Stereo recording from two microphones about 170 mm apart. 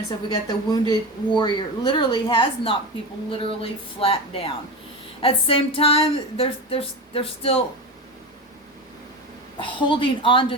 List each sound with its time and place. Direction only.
0.4 s speech: 25° left (ahead or behind)
9.6 s speech: 30° left (ahead or behind)